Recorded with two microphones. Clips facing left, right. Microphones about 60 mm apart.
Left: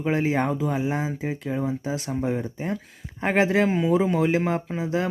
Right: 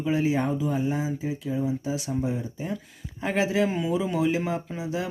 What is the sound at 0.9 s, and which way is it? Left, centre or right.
Speech, left.